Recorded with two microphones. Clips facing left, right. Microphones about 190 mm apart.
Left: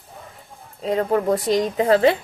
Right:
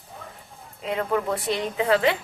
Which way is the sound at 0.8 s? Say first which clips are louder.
Left 5 dB; 35° left (ahead or behind).